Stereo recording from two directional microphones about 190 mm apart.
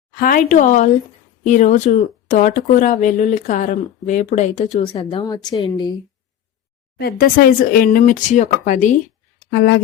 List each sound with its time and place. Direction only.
0.2 s speech: 45° left (ahead or behind)
5.2 s a woman's voice: 20° left (ahead or behind)
7.0 s speech: 55° left (ahead or behind)
9.5 s speech: 60° left (ahead or behind)